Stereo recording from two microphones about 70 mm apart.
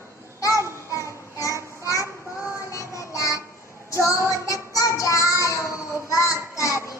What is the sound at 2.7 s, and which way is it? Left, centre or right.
Music, left.